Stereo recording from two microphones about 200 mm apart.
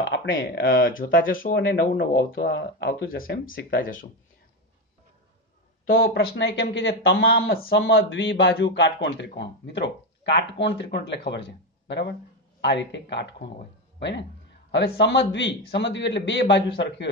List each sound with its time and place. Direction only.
0.1 s a man's voice: 65° left (ahead or behind)
0.7 s speech: 45° left (ahead or behind)
5.9 s a man's voice: 50° left (ahead or behind); by 7.2 s 70° left (ahead or behind)
7.2 s speech: 50° left (ahead or behind)
8.0 s a man's voice: 70° left (ahead or behind)